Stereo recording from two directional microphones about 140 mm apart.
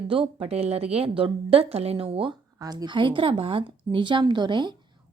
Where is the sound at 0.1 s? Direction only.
40° right (ahead or behind).